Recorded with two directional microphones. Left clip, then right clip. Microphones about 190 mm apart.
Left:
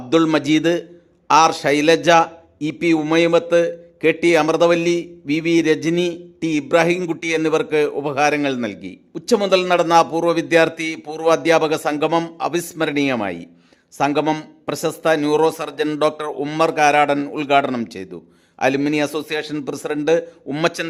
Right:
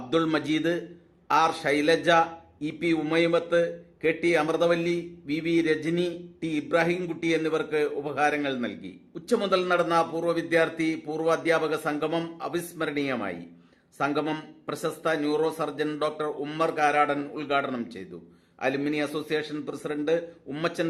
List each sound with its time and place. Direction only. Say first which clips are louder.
0.1 s a man's voice: left 9 dB; 50° left (ahead or behind)